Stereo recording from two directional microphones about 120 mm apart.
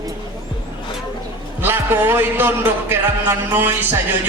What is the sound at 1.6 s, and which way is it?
Speech, 15° right (ahead or behind).